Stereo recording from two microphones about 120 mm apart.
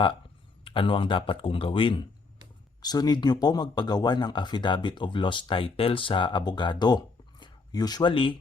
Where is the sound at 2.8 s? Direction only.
35° left (ahead or behind).